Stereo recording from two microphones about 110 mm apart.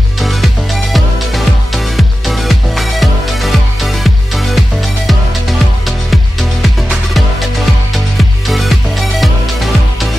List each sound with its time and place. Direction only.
0.2 s music: centre (ahead or behind)